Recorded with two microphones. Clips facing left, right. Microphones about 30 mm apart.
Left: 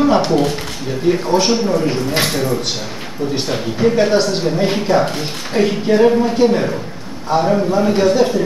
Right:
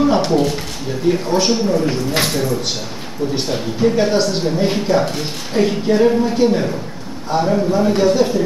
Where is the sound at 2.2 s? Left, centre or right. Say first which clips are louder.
Left 1 dB; left.